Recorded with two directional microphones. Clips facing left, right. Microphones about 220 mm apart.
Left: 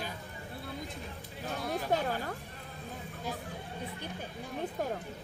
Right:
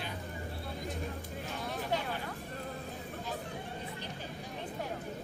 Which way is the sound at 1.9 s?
45° left (ahead or behind).